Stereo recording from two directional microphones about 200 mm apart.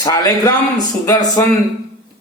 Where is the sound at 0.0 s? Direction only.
20° left (ahead or behind).